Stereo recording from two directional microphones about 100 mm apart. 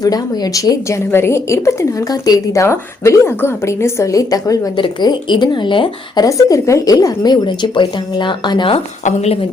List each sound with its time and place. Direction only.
0.0 s a woman's voice: 40° left (ahead or behind)
4.8 s speech: 50° left (ahead or behind)
6.2 s speech: 35° left (ahead or behind); by 8.8 s 55° left (ahead or behind)